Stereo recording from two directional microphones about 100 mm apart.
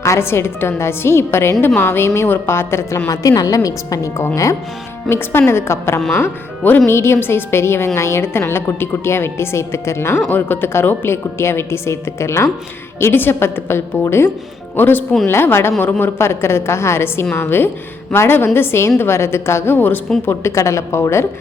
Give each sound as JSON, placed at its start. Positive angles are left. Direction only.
{"t": 0.0, "sound": "a woman's voice", "side_deg": 25}
{"t": 3.1, "sound": "a woman's voice", "side_deg": 35}
{"t": 5.0, "sound": "a woman's voice", "side_deg": 25}